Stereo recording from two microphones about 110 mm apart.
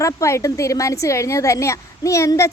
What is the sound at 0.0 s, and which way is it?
A woman's voice, 25° left (ahead or behind).